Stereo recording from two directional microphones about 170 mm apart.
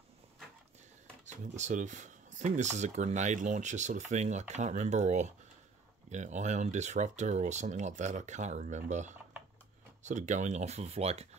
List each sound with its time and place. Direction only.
1.2 s speech: 45° right (ahead or behind)